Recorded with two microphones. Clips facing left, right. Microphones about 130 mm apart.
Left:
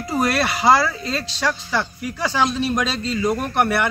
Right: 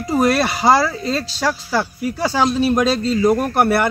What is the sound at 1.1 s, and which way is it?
Speech, 5° right (ahead or behind).